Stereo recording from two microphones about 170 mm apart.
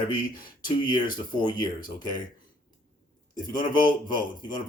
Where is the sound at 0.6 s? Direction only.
25° left (ahead or behind).